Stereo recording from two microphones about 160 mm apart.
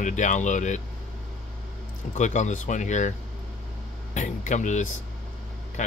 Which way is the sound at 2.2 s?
50° left (ahead or behind).